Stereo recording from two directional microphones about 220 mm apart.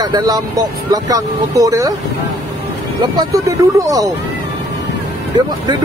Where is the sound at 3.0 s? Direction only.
15° right (ahead or behind).